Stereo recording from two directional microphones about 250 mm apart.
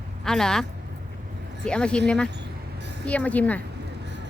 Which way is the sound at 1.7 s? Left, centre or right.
Centre.